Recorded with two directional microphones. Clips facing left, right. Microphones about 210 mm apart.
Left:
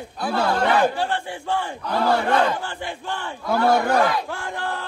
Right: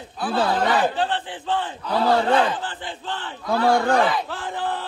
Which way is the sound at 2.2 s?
10° left (ahead or behind).